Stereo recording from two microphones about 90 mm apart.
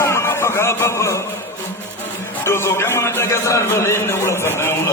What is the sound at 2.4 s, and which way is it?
A man's voice, 30° left (ahead or behind).